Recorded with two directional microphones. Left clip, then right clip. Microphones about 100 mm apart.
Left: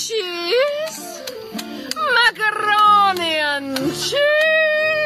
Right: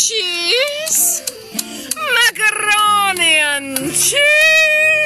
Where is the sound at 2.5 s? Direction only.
10° right (ahead or behind).